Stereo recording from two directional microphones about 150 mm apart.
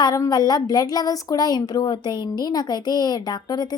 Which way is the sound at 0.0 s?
25° left (ahead or behind).